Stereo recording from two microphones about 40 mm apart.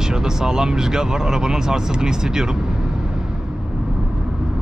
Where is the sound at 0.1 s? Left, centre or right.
Centre.